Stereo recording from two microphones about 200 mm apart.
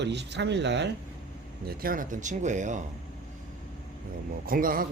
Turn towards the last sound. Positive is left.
turn(degrees=-45)  # may be behind; listen again after turning